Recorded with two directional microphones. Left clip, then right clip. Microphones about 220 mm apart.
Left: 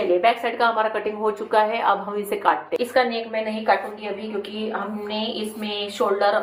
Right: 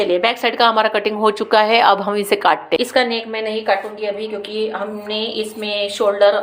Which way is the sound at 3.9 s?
30° right (ahead or behind).